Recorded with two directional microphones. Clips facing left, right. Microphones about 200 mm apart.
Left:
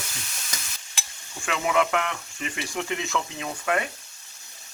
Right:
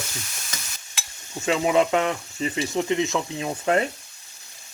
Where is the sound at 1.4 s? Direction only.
25° right (ahead or behind).